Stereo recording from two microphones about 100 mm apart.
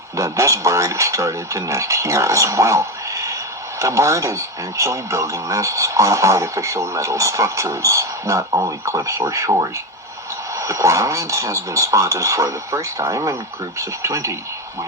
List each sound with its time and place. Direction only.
0.2 s speech: 30° right (ahead or behind)